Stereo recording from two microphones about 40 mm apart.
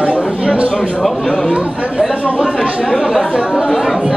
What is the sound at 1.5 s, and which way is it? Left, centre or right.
Speech, right.